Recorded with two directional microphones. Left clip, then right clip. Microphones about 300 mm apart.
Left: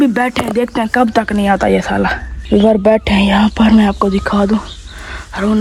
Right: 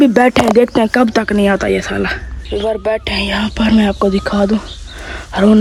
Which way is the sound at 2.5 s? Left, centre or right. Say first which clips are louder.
Left 6 dB; left.